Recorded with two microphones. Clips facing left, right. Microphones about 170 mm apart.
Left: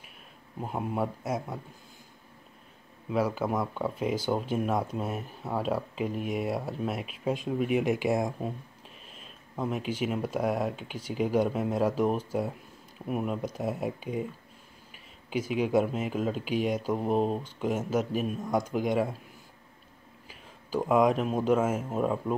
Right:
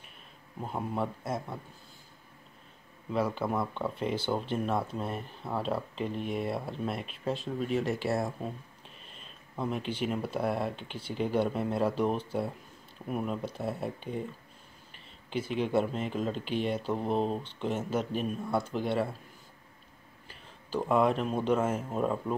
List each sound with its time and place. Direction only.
0.6 s speech: 10° left (ahead or behind)
3.1 s speech: 5° left (ahead or behind)
20.2 s speech: 10° left (ahead or behind)